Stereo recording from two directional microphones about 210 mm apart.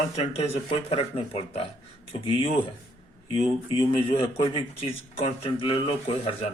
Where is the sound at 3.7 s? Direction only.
25° left (ahead or behind).